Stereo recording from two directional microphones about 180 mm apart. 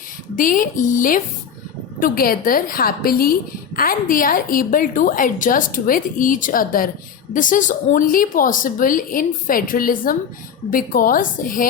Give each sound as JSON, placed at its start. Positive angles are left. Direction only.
{"t": 0.3, "sound": "a woman's voice", "side_deg": 50}